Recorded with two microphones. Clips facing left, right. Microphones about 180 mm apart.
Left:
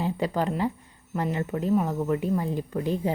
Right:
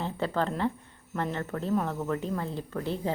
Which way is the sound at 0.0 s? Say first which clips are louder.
Left 3 dB; 15° left (ahead or behind).